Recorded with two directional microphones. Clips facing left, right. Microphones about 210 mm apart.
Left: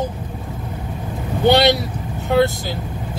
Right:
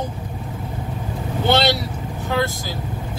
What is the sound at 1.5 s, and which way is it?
Speech, 15° left (ahead or behind).